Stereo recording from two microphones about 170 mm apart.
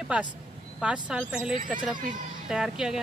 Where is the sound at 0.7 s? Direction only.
5° right (ahead or behind).